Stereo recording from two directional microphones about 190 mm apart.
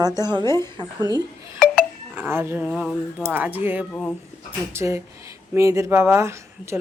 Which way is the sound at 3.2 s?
10° right (ahead or behind).